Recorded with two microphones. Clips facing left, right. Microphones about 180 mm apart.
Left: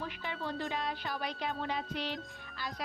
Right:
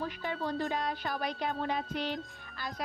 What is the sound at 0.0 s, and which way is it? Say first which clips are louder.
A woman's voice: right 4 dB; 40° right (ahead or behind).